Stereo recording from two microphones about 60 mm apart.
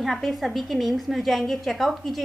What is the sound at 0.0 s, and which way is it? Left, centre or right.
A woman's voice, centre.